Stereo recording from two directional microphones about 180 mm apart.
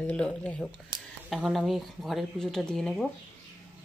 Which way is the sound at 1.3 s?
Centre (ahead or behind).